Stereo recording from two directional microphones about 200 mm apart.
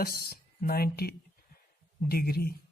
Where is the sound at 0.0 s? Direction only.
50° left (ahead or behind).